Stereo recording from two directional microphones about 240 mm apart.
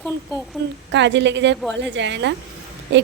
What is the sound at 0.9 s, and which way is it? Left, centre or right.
A woman's voice, right.